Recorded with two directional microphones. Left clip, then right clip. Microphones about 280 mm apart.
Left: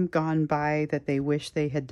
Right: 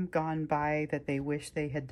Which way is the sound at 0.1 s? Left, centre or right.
Centre.